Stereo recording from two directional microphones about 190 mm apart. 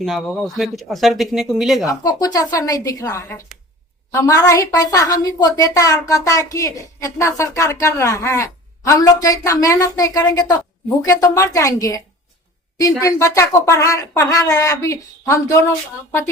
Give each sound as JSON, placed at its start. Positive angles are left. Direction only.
{"t": 0.0, "sound": "speech", "side_deg": 0}
{"t": 1.9, "sound": "a woman's voice", "side_deg": 20}